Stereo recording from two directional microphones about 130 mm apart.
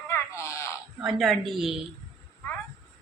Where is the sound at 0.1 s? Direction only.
20° left (ahead or behind).